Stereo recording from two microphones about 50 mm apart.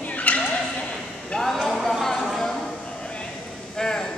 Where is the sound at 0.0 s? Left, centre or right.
Left.